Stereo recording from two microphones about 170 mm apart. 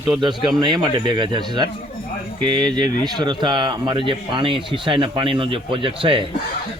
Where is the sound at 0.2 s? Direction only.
25° right (ahead or behind).